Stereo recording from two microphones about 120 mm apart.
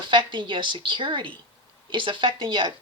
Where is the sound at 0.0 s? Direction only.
40° right (ahead or behind).